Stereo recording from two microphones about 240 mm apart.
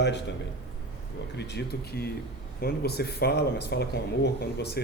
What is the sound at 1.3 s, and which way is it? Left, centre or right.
Speech, left.